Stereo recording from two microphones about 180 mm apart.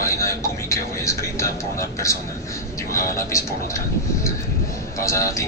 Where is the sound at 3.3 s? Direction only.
15° left (ahead or behind).